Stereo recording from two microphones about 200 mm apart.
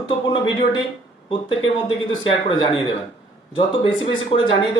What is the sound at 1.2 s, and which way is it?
Speech, 25° left (ahead or behind).